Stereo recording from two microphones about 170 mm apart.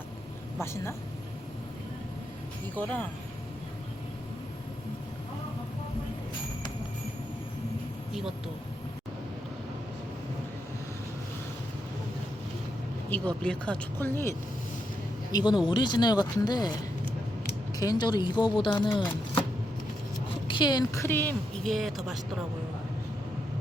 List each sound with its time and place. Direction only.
0.6 s a woman's voice: 15° left (ahead or behind)
2.7 s a woman's voice: 10° left (ahead or behind)
13.1 s a woman's voice: 10° left (ahead or behind)
15.3 s speech: 25° left (ahead or behind)
17.7 s speech: 25° left (ahead or behind)
20.5 s a woman's voice: 25° left (ahead or behind); by 22.2 s centre (ahead or behind)